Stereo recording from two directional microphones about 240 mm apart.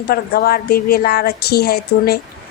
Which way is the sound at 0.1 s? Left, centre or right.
Left.